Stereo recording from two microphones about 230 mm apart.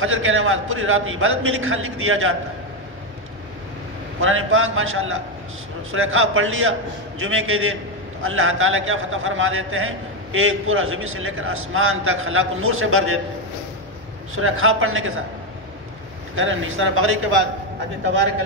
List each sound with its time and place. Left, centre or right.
0.0 s a man's voice: right
4.2 s a man's voice: right
14.3 s a man's voice: right
16.3 s a man's voice: right